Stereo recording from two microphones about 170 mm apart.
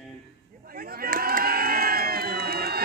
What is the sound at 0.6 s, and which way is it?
Crowd, 60° right (ahead or behind).